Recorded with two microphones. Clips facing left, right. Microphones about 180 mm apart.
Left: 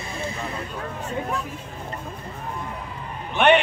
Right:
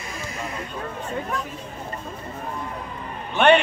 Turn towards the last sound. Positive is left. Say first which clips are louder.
# right 1 dB
turn(degrees=15)  # may be behind; listen again after turning